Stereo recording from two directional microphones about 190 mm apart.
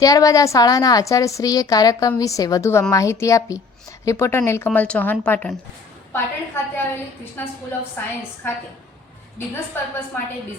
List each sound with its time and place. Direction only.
0.0 s a woman's voice: 20° left (ahead or behind)
8.0 s speech: 10° left (ahead or behind)
9.7 s speech: 10° left (ahead or behind)